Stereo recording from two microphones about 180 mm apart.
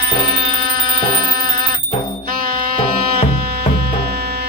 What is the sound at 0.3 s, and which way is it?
Music, 55° right (ahead or behind).